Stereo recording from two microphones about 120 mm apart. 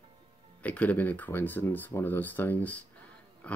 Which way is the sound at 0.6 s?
10° left (ahead or behind).